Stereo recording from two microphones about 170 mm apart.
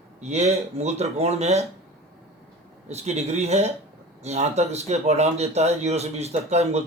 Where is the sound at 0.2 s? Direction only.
40° right (ahead or behind).